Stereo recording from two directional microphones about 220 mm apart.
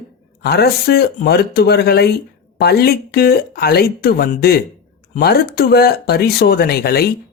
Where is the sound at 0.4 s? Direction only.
45° left (ahead or behind).